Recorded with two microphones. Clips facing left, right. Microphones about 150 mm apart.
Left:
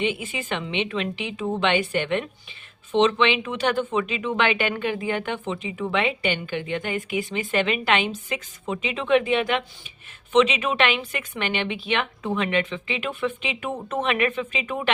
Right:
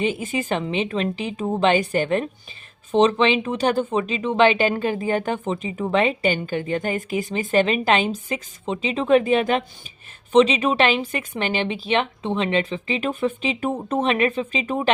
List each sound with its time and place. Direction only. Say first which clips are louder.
0.0 s speech: right 3 dB; 40° right (ahead or behind)